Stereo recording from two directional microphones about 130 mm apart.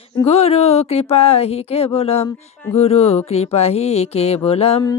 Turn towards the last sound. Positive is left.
turn(degrees=50)  # may be behind; listen again after turning